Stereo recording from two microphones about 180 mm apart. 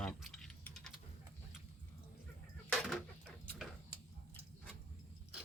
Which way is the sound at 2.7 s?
Centre (ahead or behind).